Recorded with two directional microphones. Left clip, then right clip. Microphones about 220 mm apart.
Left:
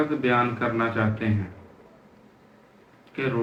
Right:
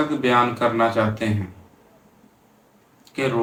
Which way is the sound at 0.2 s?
20° right (ahead or behind).